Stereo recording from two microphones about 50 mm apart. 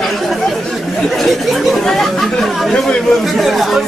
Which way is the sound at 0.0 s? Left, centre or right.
Centre.